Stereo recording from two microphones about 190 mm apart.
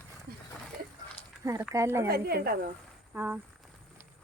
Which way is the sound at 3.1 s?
10° right (ahead or behind).